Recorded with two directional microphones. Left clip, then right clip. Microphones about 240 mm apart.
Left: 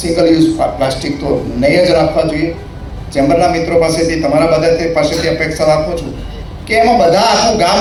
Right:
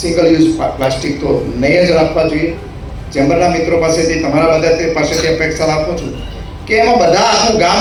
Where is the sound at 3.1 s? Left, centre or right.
Left.